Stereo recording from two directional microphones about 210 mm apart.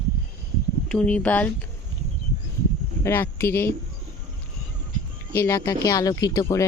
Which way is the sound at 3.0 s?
10° left (ahead or behind).